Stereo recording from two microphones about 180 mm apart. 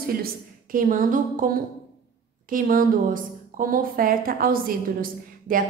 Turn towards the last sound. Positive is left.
turn(degrees=-50)  # may be behind; listen again after turning